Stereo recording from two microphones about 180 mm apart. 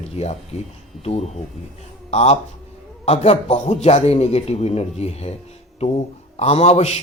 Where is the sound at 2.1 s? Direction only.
35° left (ahead or behind).